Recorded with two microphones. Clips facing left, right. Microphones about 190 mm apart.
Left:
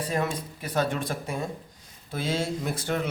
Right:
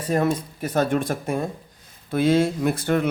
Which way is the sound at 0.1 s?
45° right (ahead or behind).